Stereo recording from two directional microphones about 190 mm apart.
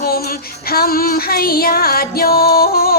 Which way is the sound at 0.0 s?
50° left (ahead or behind).